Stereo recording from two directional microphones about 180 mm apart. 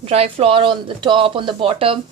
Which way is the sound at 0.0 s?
35° right (ahead or behind).